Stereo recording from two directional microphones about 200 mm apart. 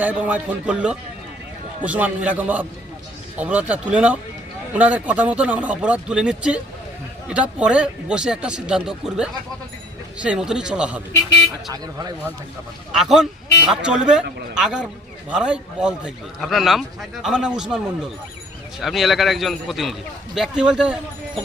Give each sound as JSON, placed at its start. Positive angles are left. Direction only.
{"t": 0.0, "sound": "speech", "side_deg": -10}
{"t": 7.6, "sound": "a man's voice", "side_deg": -5}
{"t": 11.7, "sound": "speech", "side_deg": -20}
{"t": 13.0, "sound": "a man's voice", "side_deg": 0}